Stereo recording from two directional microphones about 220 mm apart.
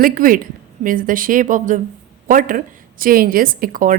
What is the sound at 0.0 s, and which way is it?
A woman's voice, 40° right (ahead or behind).